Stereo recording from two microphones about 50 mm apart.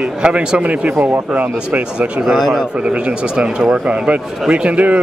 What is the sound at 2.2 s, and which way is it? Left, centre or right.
Speech, centre.